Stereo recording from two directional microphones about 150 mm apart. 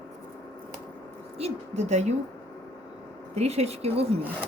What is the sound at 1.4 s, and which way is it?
Speech, 50° right (ahead or behind).